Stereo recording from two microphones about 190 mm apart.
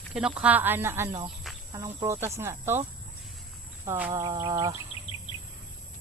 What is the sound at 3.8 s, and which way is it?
Speech, 15° right (ahead or behind).